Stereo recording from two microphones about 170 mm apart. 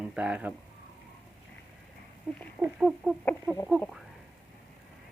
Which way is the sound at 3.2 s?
10° left (ahead or behind).